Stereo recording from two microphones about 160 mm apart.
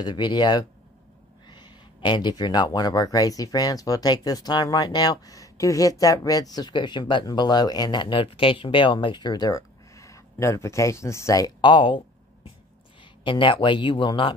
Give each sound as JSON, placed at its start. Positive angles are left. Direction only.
{"t": 0.0, "sound": "speech", "side_deg": 25}
{"t": 13.2, "sound": "speech", "side_deg": 30}